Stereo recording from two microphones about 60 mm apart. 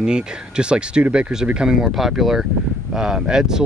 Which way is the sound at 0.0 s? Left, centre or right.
Centre.